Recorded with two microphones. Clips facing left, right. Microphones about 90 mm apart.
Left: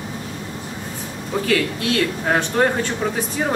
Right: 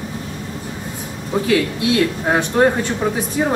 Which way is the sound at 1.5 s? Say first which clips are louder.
Right 3 dB; 15° right (ahead or behind).